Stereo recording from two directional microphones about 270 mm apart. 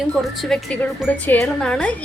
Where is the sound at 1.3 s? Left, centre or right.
Centre.